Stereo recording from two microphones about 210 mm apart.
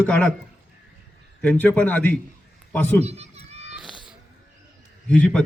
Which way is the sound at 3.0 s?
30° right (ahead or behind).